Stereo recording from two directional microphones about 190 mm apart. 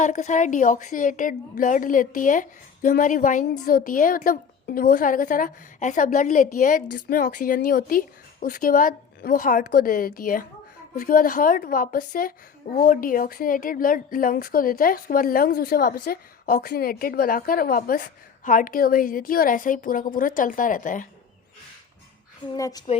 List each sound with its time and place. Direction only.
0.0 s a woman's voice: 40° left (ahead or behind)
22.5 s a woman's voice: 20° left (ahead or behind)